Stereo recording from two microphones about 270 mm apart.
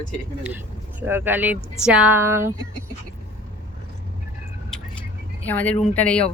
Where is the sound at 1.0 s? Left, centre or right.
Centre.